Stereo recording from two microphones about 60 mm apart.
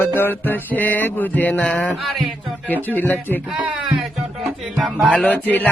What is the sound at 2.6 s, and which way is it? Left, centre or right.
Music, left.